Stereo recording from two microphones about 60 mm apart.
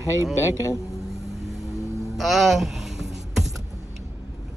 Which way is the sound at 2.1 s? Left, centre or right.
Centre.